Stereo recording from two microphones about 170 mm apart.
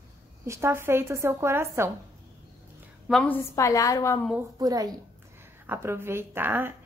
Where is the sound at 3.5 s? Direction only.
20° left (ahead or behind).